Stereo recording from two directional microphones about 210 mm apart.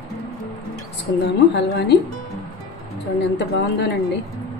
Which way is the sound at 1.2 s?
50° left (ahead or behind).